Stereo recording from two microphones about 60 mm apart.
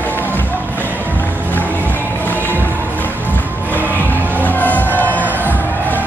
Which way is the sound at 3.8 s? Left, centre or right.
Left.